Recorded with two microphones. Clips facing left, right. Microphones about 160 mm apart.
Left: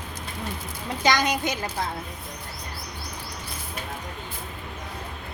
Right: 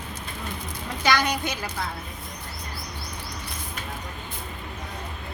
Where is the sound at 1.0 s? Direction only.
15° left (ahead or behind).